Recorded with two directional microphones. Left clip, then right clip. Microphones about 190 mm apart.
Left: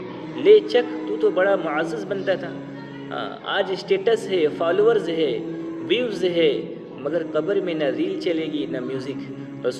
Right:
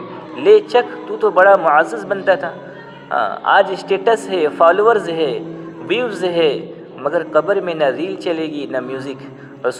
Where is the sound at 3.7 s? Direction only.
10° left (ahead or behind).